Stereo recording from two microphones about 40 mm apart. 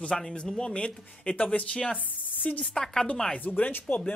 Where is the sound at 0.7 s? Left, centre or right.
Left.